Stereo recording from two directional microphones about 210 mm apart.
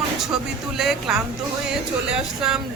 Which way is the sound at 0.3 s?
Centre (ahead or behind).